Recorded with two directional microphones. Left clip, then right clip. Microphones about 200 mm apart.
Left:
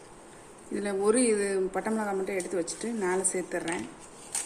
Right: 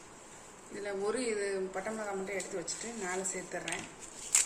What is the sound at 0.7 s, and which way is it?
Speech, 55° left (ahead or behind).